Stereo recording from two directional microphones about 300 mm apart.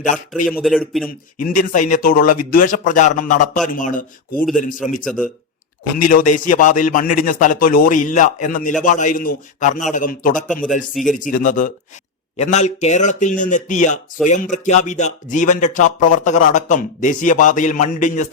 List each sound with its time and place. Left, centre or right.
0.4 s speech: centre
1.4 s speech: left
5.0 s speech: centre
6.0 s speech: left
10.9 s speech: centre
11.2 s speech: left